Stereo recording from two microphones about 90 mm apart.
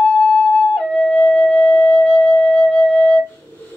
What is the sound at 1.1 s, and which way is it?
Music, 15° left (ahead or behind).